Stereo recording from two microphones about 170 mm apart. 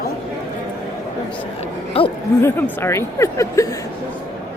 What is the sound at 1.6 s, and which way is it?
Speech, 35° left (ahead or behind).